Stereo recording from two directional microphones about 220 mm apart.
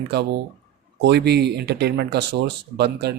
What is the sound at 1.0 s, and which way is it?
Speech, 50° right (ahead or behind).